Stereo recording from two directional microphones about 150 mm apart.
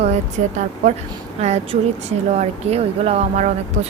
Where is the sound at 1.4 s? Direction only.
45° right (ahead or behind).